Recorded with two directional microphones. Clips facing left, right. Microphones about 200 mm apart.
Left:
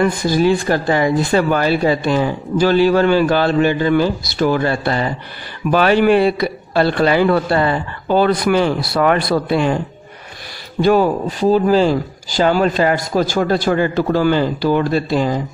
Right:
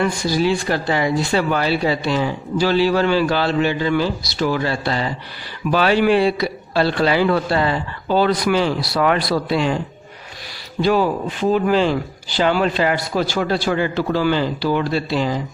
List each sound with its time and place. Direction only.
0.0 s speech: 50° left (ahead or behind)
10.8 s speech: 50° left (ahead or behind)